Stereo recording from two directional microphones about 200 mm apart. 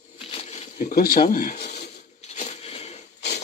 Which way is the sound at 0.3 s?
30° left (ahead or behind).